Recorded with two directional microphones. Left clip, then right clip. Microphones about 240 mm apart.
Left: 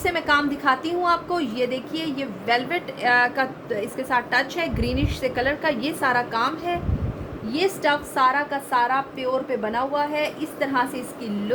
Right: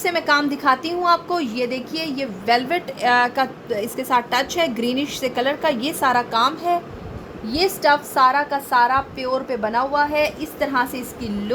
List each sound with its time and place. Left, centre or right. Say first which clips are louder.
0.0 s a woman's voice: right 2 dB; centre